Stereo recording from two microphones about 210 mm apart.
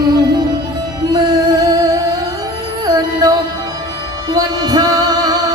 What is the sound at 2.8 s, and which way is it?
Music, 15° right (ahead or behind).